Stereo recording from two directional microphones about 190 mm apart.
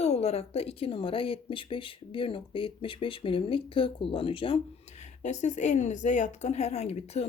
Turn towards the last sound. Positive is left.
turn(degrees=35)  # may be behind; listen again after turning